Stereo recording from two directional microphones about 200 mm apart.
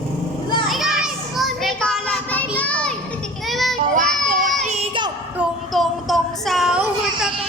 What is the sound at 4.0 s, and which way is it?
Child singing, 40° right (ahead or behind).